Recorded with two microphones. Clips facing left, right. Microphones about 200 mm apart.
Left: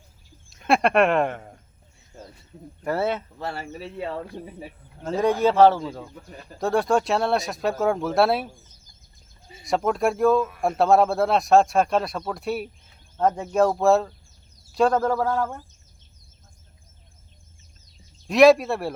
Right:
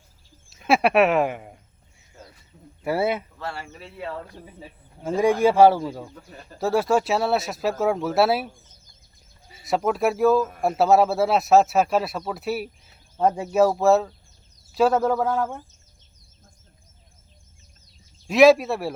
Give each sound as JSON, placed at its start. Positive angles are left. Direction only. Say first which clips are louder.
{"t": 0.5, "sound": "speech", "louder": "right 1 dB", "side_deg": -5}
{"t": 2.8, "sound": "speech", "louder": "right 1 dB", "side_deg": -10}
{"t": 3.3, "sound": "speech", "louder": "left 2 dB", "side_deg": 35}
{"t": 3.9, "sound": "speech", "louder": "left 2 dB", "side_deg": 20}
{"t": 4.9, "sound": "speech", "louder": "right 2 dB", "side_deg": -10}
{"t": 9.6, "sound": "speech", "louder": "even", "side_deg": -5}
{"t": 18.3, "sound": "speech", "louder": "even", "side_deg": 0}